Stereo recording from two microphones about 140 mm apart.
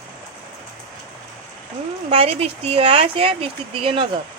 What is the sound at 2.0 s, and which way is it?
Speech, 45° right (ahead or behind).